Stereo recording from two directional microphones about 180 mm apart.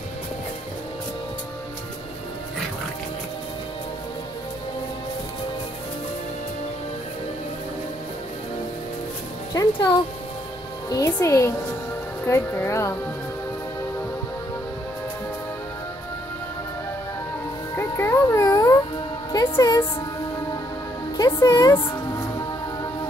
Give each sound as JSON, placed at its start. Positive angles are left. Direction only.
{"t": 9.5, "sound": "music", "side_deg": 20}
{"t": 10.9, "sound": "speech", "side_deg": 20}
{"t": 17.7, "sound": "music", "side_deg": 15}
{"t": 19.5, "sound": "speech", "side_deg": 15}
{"t": 21.2, "sound": "speech", "side_deg": 20}